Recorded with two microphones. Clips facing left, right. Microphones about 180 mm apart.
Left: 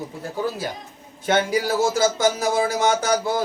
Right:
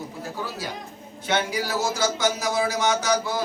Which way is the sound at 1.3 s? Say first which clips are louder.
Left 5 dB; 50° left (ahead or behind).